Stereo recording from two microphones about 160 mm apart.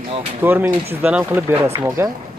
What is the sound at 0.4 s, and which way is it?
Speech, 10° right (ahead or behind).